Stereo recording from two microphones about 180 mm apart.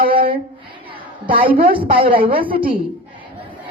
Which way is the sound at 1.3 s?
50° right (ahead or behind).